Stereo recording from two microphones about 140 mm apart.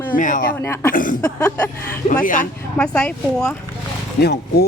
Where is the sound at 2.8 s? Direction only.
5° left (ahead or behind).